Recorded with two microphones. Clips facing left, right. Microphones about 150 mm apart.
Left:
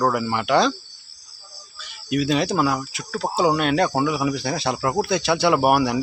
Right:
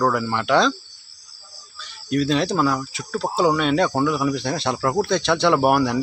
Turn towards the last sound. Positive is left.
turn(degrees=5)  # may be behind; listen again after turning